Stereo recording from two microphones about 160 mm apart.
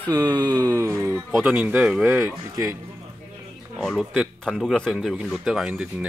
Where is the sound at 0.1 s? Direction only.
15° right (ahead or behind).